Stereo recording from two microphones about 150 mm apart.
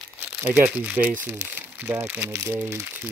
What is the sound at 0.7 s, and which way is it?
Speech, 10° right (ahead or behind).